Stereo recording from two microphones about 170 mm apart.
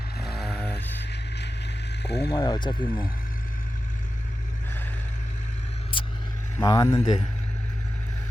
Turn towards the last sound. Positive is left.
turn(degrees=20)  # may be behind; listen again after turning